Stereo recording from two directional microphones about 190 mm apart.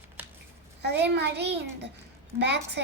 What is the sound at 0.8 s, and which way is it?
A child's voice, 60° right (ahead or behind).